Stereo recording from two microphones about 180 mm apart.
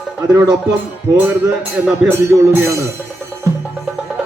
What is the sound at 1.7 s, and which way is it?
Speech, 10° right (ahead or behind).